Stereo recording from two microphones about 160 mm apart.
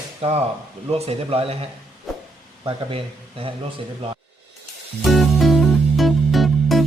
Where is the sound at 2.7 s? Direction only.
35° right (ahead or behind).